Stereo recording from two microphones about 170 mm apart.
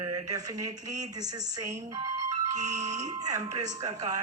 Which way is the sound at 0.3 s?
20° right (ahead or behind).